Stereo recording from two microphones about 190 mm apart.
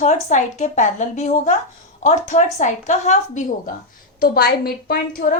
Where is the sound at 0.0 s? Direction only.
40° left (ahead or behind).